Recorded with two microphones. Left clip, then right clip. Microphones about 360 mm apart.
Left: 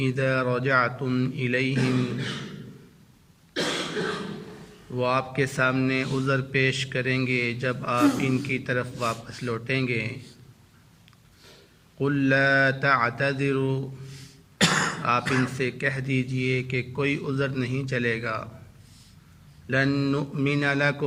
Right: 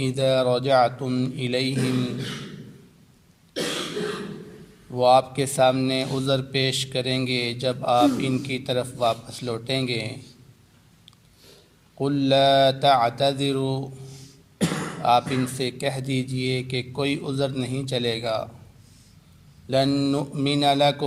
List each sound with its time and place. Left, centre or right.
0.0 s speech: centre
4.9 s speech: centre
11.9 s speech: centre
14.6 s throat clearing: left
15.0 s speech: centre
19.7 s speech: centre